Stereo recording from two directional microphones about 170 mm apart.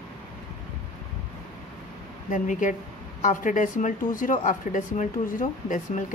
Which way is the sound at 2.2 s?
50° left (ahead or behind).